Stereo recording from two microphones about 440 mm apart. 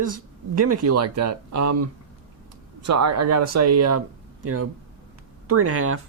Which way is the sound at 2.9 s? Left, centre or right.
Right.